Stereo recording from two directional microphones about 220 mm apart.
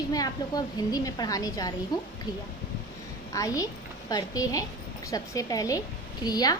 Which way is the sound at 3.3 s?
15° left (ahead or behind).